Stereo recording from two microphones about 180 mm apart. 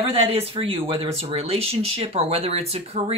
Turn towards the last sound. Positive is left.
turn(degrees=-35)  # may be behind; listen again after turning